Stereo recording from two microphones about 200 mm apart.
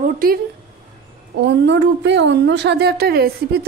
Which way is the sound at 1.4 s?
60° right (ahead or behind).